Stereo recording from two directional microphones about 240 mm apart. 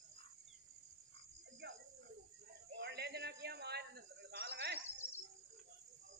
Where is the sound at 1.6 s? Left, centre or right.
Right.